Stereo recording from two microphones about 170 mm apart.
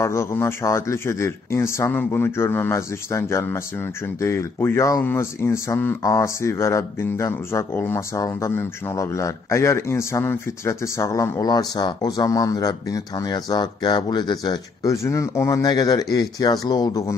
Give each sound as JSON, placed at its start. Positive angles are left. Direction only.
{"t": 0.0, "sound": "speech", "side_deg": 15}